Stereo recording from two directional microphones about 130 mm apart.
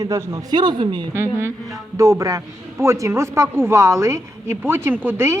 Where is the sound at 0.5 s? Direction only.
35° right (ahead or behind).